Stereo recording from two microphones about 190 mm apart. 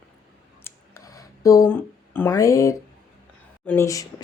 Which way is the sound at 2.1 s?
15° left (ahead or behind).